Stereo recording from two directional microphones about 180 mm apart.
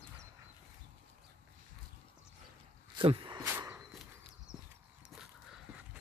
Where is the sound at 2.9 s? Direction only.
25° right (ahead or behind).